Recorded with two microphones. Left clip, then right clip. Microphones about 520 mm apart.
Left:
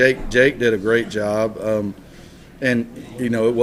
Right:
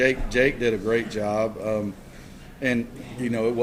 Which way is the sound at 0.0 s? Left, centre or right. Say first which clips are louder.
Left 6 dB; left.